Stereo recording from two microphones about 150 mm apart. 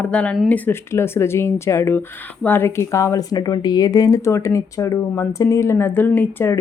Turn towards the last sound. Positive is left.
turn(degrees=15)  # may be behind; listen again after turning